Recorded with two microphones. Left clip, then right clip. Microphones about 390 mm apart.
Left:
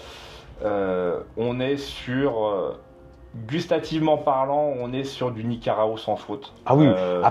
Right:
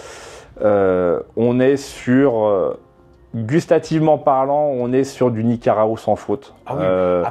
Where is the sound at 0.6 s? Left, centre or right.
Right.